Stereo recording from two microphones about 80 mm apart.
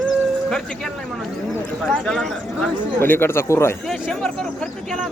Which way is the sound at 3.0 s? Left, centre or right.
Left.